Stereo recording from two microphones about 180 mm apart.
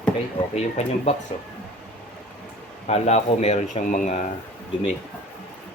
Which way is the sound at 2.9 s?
40° left (ahead or behind).